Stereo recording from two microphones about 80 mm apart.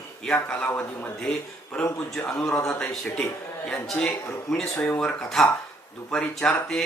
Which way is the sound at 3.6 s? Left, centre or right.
Centre.